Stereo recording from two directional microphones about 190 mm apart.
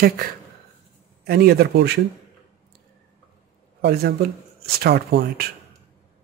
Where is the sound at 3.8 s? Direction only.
55° right (ahead or behind).